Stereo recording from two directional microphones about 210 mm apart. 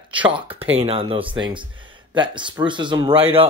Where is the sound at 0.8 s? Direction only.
25° right (ahead or behind).